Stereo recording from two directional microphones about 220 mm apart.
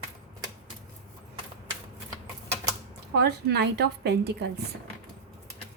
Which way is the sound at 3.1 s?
50° right (ahead or behind).